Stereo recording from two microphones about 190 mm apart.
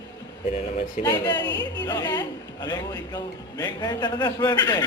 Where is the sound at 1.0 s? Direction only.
20° left (ahead or behind).